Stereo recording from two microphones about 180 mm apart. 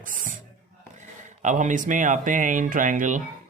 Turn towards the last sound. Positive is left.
turn(degrees=-45)  # may be behind; listen again after turning